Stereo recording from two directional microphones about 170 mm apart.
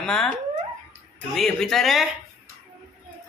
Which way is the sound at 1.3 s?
Centre (ahead or behind).